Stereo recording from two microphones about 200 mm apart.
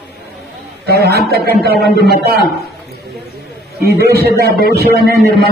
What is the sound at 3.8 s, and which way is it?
A man's voice, 50° right (ahead or behind).